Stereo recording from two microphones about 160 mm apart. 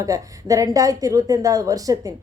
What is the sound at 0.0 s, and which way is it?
A woman's voice, 20° right (ahead or behind).